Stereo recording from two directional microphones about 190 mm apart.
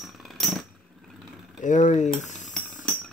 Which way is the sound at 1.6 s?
40° left (ahead or behind).